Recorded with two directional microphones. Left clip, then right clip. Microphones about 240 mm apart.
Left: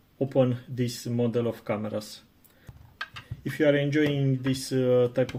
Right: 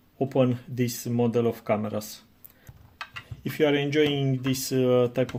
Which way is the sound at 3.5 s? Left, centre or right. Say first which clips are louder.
Even; right.